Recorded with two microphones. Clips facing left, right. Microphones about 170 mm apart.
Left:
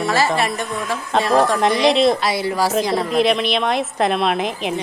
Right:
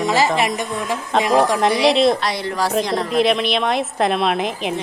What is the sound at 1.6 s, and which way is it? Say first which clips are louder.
Speech: even; centre (ahead or behind).